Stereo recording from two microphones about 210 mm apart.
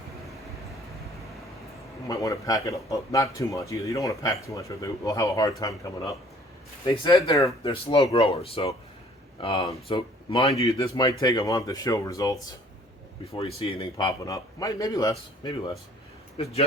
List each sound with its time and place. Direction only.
2.0 s a man's voice: 15° left (ahead or behind)
10.5 s a man's voice: 15° left (ahead or behind)
13.6 s speech: 25° left (ahead or behind)
13.9 s a man's voice: 15° left (ahead or behind)
16.4 s speech: 30° left (ahead or behind)